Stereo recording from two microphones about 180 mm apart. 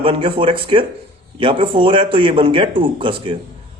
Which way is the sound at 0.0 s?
30° right (ahead or behind).